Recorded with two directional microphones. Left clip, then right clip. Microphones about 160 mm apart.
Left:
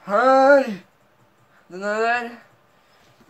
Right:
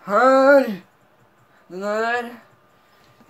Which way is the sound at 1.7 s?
25° right (ahead or behind).